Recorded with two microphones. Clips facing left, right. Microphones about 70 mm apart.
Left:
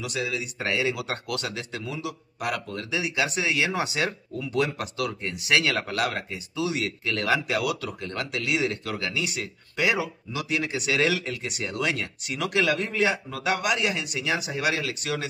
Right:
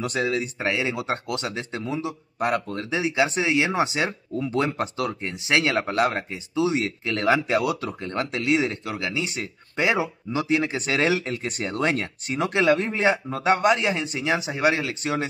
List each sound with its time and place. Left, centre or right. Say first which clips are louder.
0.0 s speech: right 5 dB; right
0.6 s speech: right 1 dB; right